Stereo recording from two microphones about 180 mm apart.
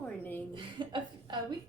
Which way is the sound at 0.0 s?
10° left (ahead or behind).